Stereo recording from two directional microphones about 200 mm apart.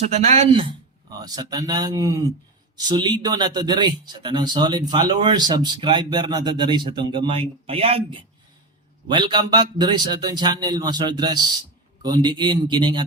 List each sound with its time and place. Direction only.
0.0 s speech: 35° right (ahead or behind)
1.2 s speech: 20° right (ahead or behind)